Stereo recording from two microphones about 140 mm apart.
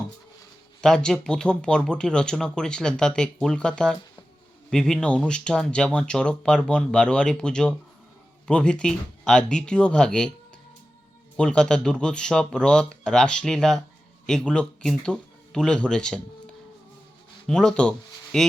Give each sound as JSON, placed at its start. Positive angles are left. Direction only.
{"t": 0.8, "sound": "speech", "side_deg": 5}
{"t": 11.3, "sound": "speech", "side_deg": 5}